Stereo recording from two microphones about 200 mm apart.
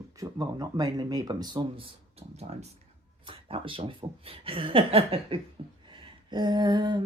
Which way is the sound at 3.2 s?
25° right (ahead or behind).